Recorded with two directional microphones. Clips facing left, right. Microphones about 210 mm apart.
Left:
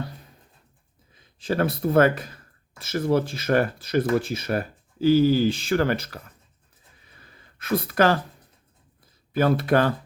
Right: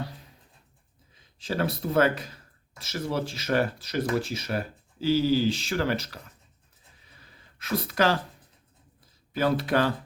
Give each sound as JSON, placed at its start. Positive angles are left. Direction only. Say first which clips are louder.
{"t": 1.4, "sound": "speech", "louder": "left 5 dB", "side_deg": 55}
{"t": 7.2, "sound": "a sound", "louder": "left 3 dB", "side_deg": 55}
{"t": 9.3, "sound": "speech", "louder": "left 4 dB", "side_deg": 55}